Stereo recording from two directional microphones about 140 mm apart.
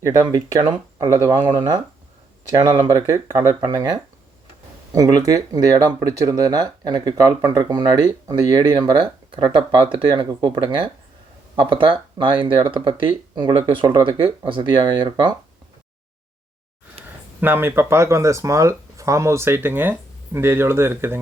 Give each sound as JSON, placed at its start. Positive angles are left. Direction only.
{"t": 0.0, "sound": "speech", "side_deg": -25}
{"t": 17.4, "sound": "speech", "side_deg": -15}